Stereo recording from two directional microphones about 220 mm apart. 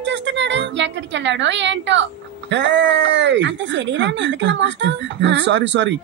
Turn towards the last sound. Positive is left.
turn(degrees=-55)  # may be behind; listen again after turning